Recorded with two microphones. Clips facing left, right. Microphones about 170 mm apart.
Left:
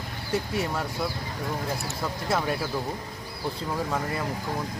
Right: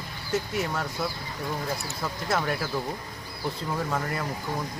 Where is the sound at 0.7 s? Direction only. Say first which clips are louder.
Left 1 dB; 5° left (ahead or behind).